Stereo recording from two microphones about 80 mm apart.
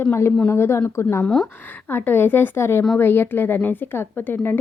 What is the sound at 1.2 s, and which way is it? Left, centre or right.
Speech, centre.